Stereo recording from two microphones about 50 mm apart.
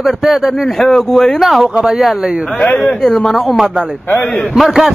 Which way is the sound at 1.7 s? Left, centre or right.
Centre.